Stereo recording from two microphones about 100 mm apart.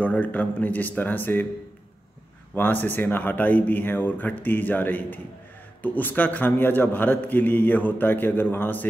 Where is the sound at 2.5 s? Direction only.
20° left (ahead or behind).